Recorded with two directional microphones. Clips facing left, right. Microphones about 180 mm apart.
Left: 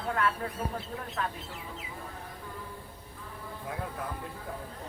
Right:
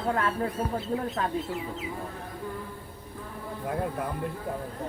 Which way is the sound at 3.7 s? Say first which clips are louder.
Right 7 dB; 55° right (ahead or behind).